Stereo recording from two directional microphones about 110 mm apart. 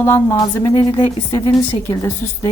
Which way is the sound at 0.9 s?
40° left (ahead or behind).